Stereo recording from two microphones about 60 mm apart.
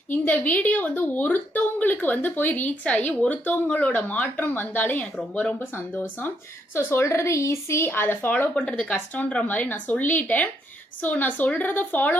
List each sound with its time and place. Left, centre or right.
0.1 s a woman's voice: left
5.7 s speech: left
6.7 s a woman's voice: left
7.9 s speech: left
8.5 s a woman's voice: centre